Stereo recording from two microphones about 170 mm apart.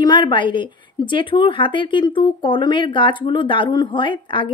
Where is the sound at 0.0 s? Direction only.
25° left (ahead or behind).